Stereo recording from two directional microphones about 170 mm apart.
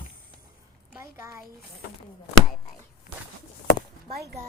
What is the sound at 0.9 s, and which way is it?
Speech, 15° right (ahead or behind).